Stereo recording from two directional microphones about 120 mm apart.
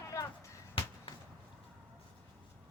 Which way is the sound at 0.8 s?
50° left (ahead or behind).